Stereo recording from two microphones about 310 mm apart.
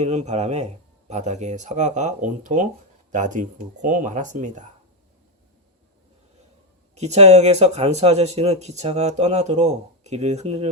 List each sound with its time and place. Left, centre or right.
0.0 s speech: right
6.9 s speech: right